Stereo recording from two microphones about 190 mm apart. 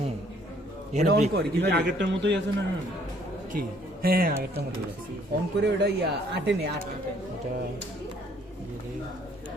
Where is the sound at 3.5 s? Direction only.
50° right (ahead or behind).